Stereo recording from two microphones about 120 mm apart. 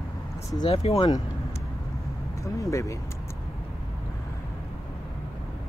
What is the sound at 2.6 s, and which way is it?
Speech, 25° left (ahead or behind).